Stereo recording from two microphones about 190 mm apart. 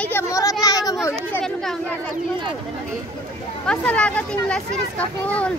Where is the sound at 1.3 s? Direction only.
Centre (ahead or behind).